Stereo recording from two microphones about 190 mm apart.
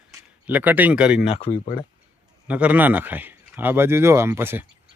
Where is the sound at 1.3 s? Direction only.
30° left (ahead or behind).